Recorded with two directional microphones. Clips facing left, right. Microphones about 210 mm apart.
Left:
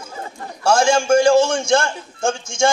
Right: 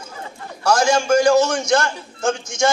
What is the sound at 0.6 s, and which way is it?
A man's voice, 25° left (ahead or behind).